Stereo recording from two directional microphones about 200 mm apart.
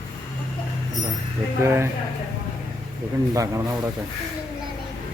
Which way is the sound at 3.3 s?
15° right (ahead or behind).